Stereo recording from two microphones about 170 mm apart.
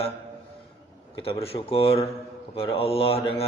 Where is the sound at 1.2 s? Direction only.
35° left (ahead or behind).